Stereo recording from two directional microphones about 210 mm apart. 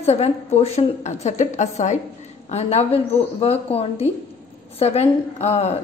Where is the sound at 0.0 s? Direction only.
30° left (ahead or behind).